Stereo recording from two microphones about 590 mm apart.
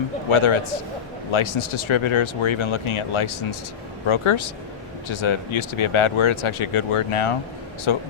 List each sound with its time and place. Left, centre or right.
0.3 s speech: left